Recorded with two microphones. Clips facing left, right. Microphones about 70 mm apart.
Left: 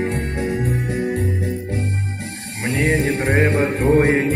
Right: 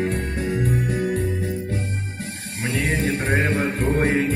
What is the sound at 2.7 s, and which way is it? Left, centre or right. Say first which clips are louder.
Music: left 5 dB; left.